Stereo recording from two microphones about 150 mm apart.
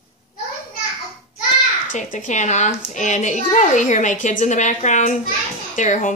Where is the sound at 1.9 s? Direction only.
55° left (ahead or behind).